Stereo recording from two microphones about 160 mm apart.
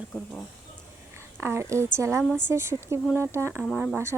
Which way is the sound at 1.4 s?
15° right (ahead or behind).